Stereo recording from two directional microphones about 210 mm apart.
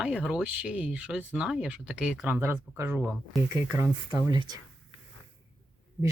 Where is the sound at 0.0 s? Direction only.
5° right (ahead or behind).